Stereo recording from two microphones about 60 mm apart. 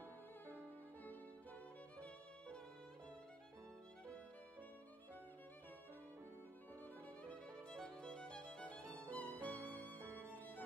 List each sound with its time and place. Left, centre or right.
2.0 s music: centre
7.2 s music: centre
8.8 s music: right
9.1 s music: left
9.6 s music: right